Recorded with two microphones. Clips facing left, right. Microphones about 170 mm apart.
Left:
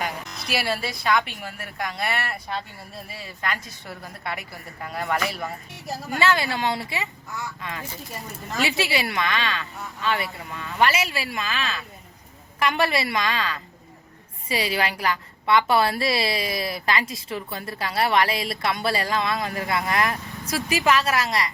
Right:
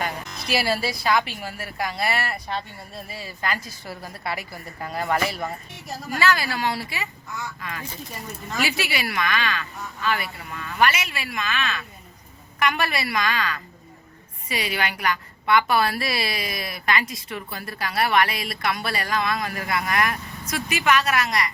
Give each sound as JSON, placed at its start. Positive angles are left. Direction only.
{"t": 0.1, "sound": "a woman's voice", "side_deg": 0}
{"t": 6.1, "sound": "a woman's voice", "side_deg": 20}
{"t": 11.0, "sound": "a woman's voice", "side_deg": 35}